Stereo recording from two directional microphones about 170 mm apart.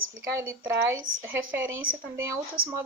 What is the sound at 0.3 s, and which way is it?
Speech, 15° right (ahead or behind).